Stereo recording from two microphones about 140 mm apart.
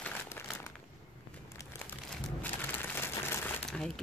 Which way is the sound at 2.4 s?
15° left (ahead or behind).